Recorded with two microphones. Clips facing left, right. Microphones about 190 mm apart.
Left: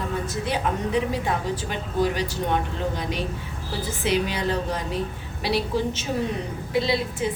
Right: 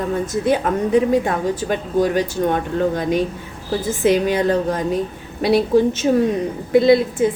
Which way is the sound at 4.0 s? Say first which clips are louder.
Right 8 dB; 50° right (ahead or behind).